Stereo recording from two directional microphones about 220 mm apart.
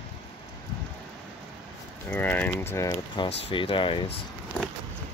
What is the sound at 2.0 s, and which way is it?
Speech, 10° left (ahead or behind).